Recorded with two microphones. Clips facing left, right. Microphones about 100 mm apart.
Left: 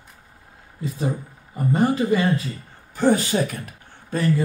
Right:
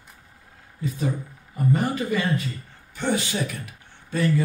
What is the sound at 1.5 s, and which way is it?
Speech, 30° left (ahead or behind).